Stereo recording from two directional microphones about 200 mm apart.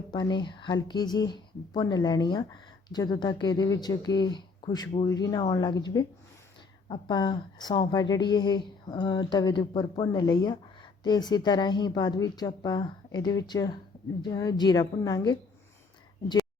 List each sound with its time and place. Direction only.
0.1 s speech: 20° left (ahead or behind)
6.8 s speech: 20° left (ahead or behind)